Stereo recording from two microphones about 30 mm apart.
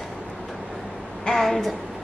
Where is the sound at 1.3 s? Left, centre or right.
Centre.